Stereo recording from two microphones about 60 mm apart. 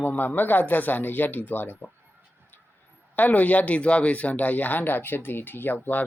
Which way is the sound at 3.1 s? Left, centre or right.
Left.